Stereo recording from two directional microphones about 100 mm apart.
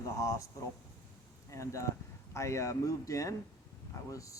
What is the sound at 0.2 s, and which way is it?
Speech, 35° left (ahead or behind).